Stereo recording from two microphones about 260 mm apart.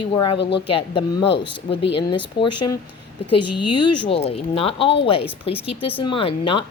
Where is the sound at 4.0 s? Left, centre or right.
Left.